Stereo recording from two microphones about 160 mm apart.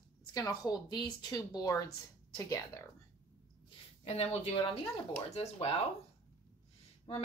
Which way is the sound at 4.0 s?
40° left (ahead or behind).